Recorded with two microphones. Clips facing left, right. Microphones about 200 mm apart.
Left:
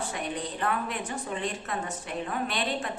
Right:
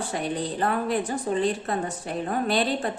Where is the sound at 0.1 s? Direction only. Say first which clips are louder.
Right 5 dB; 35° right (ahead or behind).